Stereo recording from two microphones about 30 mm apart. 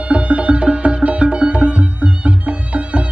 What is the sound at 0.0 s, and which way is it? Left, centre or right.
Music, right.